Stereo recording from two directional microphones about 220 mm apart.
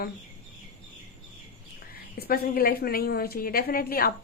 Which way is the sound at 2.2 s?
45° left (ahead or behind).